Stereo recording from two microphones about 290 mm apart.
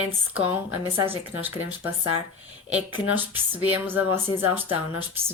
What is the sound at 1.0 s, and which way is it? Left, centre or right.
Speech, centre.